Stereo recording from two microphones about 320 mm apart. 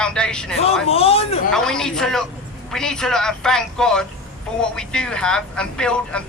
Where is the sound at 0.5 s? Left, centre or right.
Centre.